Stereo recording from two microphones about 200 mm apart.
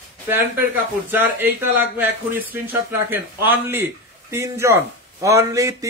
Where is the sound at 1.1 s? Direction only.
10° right (ahead or behind).